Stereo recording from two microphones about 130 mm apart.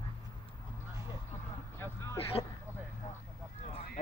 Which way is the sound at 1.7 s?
15° left (ahead or behind).